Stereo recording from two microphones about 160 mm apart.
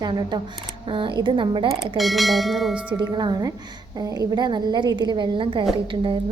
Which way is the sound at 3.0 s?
25° right (ahead or behind).